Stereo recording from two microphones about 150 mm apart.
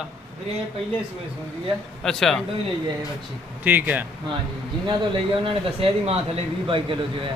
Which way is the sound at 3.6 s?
10° right (ahead or behind).